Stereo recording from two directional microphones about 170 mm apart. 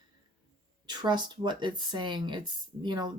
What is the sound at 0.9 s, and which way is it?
Speech, 25° right (ahead or behind).